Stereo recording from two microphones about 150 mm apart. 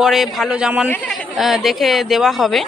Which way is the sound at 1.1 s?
Centre (ahead or behind).